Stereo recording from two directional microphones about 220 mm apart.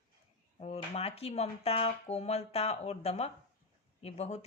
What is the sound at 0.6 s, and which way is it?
Speech, 30° left (ahead or behind).